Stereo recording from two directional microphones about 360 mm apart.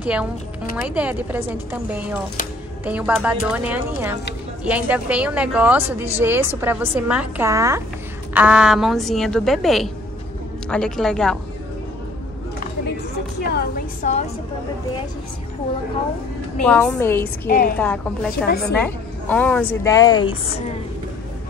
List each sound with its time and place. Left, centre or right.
0.0 s a woman's voice: centre
13.5 s a sound: left
16.6 s a woman's voice: centre
17.5 s a woman's voice: left
17.7 s a woman's voice: centre
18.5 s a woman's voice: left
18.8 s a woman's voice: centre